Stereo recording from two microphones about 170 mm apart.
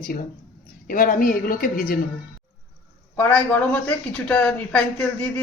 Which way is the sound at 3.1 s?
10° left (ahead or behind).